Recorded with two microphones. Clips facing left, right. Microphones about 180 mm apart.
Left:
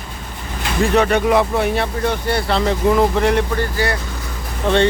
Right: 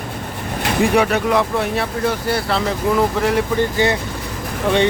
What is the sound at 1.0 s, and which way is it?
Speech, centre (ahead or behind).